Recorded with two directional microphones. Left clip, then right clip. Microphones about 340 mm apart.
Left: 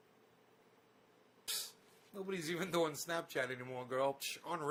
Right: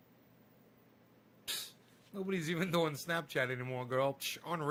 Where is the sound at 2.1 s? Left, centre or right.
Centre.